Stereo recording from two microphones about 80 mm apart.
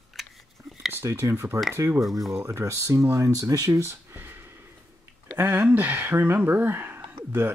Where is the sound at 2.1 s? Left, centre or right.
Centre.